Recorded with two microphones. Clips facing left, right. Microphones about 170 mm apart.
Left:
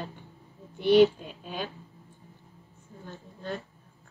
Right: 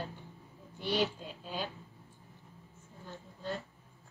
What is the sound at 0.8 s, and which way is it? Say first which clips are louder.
Speech: left 13 dB; 65° left (ahead or behind).